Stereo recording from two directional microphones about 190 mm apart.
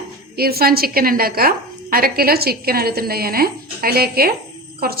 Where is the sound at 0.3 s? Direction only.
55° right (ahead or behind).